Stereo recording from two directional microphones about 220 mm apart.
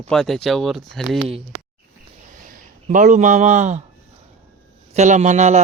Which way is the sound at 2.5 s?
35° right (ahead or behind).